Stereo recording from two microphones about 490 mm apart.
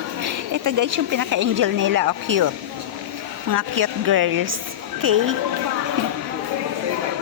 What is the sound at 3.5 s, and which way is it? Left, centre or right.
A woman's voice, right.